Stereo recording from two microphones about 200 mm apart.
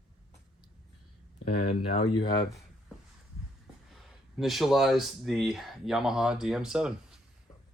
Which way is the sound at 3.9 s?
Centre (ahead or behind).